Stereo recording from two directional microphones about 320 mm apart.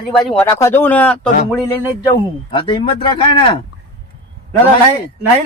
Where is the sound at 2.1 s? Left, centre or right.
Centre.